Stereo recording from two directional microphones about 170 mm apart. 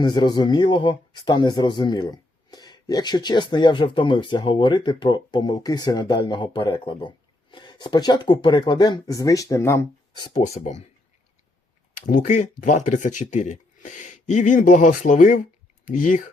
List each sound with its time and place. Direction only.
0.0 s speech: 25° left (ahead or behind)
10.2 s speech: 25° left (ahead or behind)
10.4 s speech: 40° left (ahead or behind)
11.9 s speech: 45° left (ahead or behind)